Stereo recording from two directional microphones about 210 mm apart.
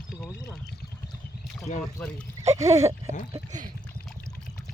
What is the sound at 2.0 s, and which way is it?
Speech, 5° left (ahead or behind).